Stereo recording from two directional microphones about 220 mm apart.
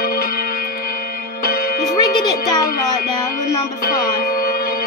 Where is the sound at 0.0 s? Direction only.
40° left (ahead or behind).